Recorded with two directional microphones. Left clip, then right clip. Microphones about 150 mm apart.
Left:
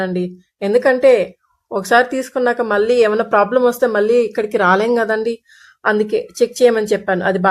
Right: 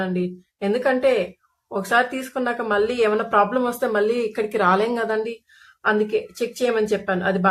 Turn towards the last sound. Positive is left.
turn(degrees=45)  # may be behind; listen again after turning